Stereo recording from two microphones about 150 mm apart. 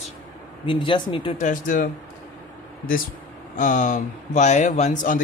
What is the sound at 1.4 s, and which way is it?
Speech, 65° left (ahead or behind).